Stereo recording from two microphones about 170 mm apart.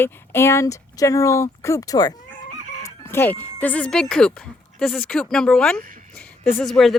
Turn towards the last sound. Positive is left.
turn(degrees=0)  # may be behind; listen again after turning